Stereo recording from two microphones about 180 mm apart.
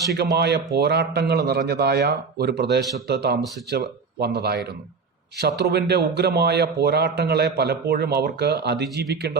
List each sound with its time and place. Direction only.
0.3 s speech: 65° right (ahead or behind)